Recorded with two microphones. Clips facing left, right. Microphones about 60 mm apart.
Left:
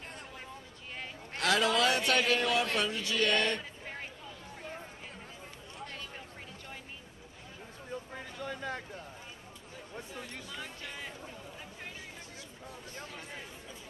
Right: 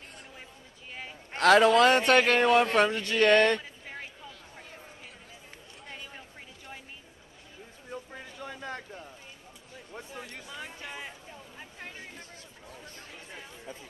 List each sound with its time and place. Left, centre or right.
1.4 s speech: right
8.1 s a sound: centre
9.9 s speech: centre